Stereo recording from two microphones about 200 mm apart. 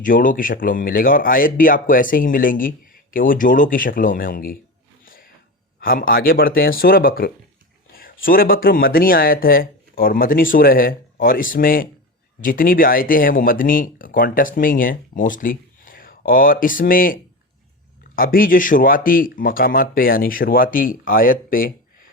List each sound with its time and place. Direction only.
0.0 s speech: 45° left (ahead or behind)
5.8 s speech: 45° left (ahead or behind)
18.2 s speech: 45° left (ahead or behind)